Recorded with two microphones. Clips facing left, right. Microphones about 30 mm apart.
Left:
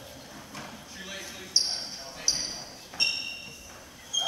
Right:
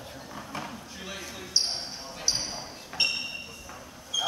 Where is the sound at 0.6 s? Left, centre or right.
Centre.